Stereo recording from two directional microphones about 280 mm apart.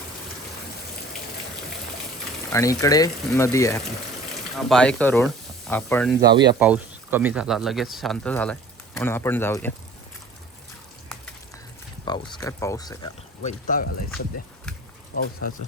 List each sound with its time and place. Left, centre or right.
2.5 s speech: centre
6.2 s speech: centre
12.0 s speech: centre
13.4 s speech: left